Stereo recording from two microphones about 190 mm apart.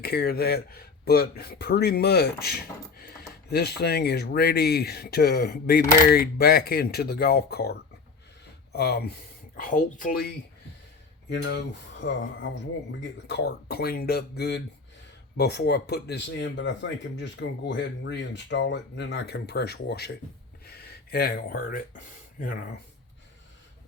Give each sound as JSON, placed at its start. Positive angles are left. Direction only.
{"t": 0.0, "sound": "speech", "side_deg": 55}
{"t": 9.6, "sound": "speech", "side_deg": 45}
{"t": 11.3, "sound": "speech", "side_deg": 65}